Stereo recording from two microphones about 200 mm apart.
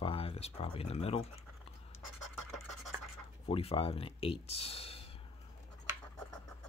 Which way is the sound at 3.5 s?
30° left (ahead or behind).